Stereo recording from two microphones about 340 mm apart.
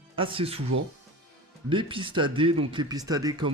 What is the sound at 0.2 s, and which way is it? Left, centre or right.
Speech, centre.